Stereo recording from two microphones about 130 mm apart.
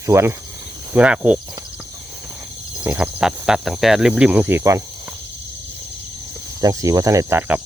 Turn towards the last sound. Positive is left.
turn(degrees=-25)  # may be behind; listen again after turning